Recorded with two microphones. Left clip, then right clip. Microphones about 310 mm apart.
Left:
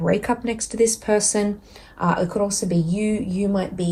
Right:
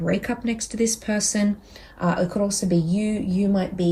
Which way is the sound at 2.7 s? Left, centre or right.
Centre.